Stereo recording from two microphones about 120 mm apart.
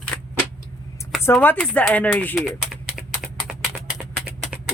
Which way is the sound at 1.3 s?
10° left (ahead or behind).